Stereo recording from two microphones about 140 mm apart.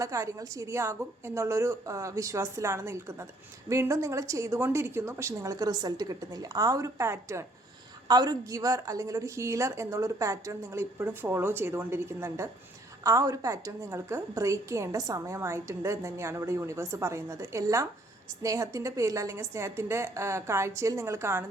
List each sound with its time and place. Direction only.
0.0 s a woman's voice: 20° right (ahead or behind)